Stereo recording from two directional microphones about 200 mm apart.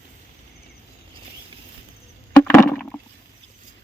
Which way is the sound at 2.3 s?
10° left (ahead or behind).